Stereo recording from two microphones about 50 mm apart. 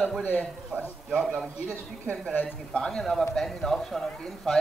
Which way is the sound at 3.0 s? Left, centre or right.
Centre.